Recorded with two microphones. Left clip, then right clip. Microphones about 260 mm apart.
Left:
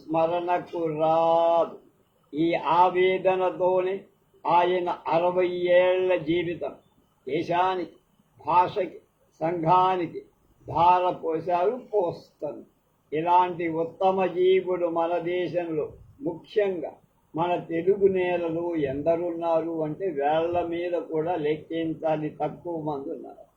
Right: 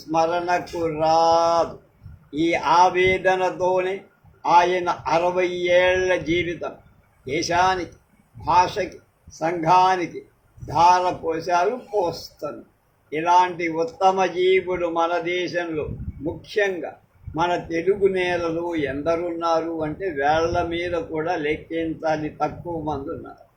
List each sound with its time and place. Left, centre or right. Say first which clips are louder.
0.1 s speech: right 3 dB; right